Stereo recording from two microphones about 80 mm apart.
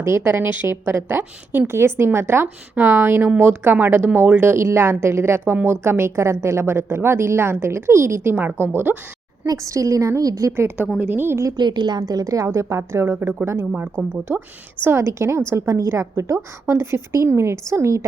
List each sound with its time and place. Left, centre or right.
0.3 s a woman's voice: right
9.5 s a woman's voice: right
11.1 s a woman's voice: right
11.5 s a woman's voice: right
14.8 s a woman's voice: right